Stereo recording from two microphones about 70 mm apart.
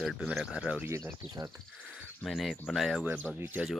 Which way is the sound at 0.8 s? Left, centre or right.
Right.